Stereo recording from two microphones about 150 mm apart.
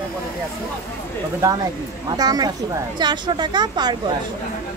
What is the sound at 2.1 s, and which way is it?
Speech, 25° right (ahead or behind).